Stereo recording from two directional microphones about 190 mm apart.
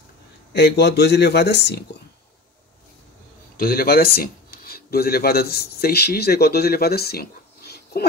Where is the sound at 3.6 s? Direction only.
50° left (ahead or behind).